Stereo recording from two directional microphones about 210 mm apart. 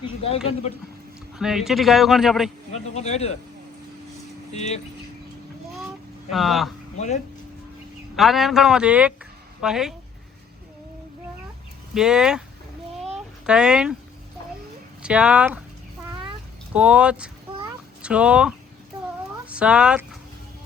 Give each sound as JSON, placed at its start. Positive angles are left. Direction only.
{"t": 0.0, "sound": "speech", "side_deg": 25}
{"t": 1.4, "sound": "a man's voice", "side_deg": 0}
{"t": 2.7, "sound": "speech", "side_deg": 30}
{"t": 4.5, "sound": "speech", "side_deg": 30}
{"t": 6.3, "sound": "a man's voice", "side_deg": 0}
{"t": 8.1, "sound": "a man's voice", "side_deg": 0}
{"t": 11.9, "sound": "a man's voice", "side_deg": -5}
{"t": 13.1, "sound": "a sound", "side_deg": -5}
{"t": 15.0, "sound": "a man's voice", "side_deg": -5}
{"t": 16.7, "sound": "a man's voice", "side_deg": -5}